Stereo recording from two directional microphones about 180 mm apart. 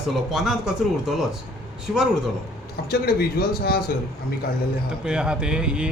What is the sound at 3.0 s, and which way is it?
Speech, 60° left (ahead or behind).